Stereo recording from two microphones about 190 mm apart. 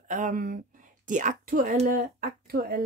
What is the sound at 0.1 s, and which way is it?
Speech, 45° right (ahead or behind).